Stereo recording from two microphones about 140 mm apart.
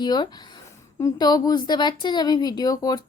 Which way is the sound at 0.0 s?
30° left (ahead or behind).